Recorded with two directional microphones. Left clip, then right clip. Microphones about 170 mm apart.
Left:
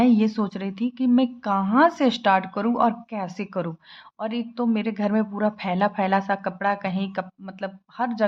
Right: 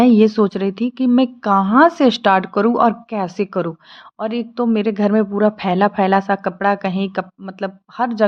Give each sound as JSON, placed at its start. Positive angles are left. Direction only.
{"t": 0.0, "sound": "a woman's voice", "side_deg": -40}